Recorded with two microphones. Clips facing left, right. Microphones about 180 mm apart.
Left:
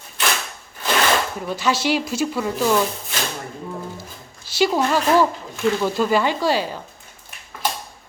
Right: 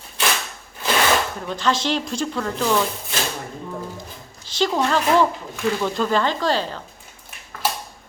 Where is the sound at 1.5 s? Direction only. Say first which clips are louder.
Left 2 dB; 10° left (ahead or behind).